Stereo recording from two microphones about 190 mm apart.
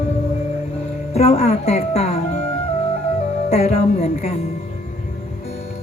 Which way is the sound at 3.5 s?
30° left (ahead or behind).